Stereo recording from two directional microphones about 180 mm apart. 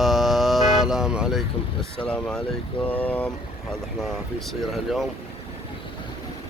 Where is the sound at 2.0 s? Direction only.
5° left (ahead or behind).